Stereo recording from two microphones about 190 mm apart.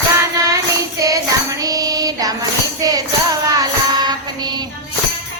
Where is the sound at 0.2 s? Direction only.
15° right (ahead or behind).